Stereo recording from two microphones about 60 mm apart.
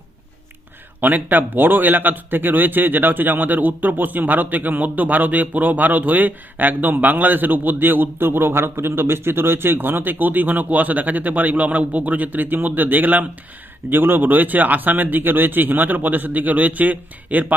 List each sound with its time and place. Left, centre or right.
1.0 s a man's voice: right